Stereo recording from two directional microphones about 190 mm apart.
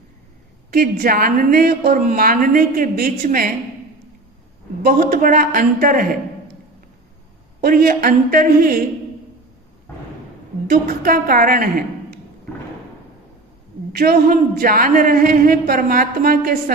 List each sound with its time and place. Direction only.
0.7 s a woman's voice: 50° right (ahead or behind)
4.8 s a woman's voice: 50° right (ahead or behind)
7.6 s a woman's voice: 50° right (ahead or behind)
10.7 s a woman's voice: 50° right (ahead or behind)
13.9 s a woman's voice: 50° right (ahead or behind)